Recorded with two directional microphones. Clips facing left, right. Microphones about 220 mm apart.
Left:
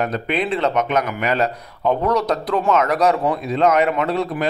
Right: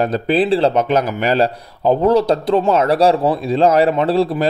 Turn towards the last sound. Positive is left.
turn(degrees=-30)  # may be behind; listen again after turning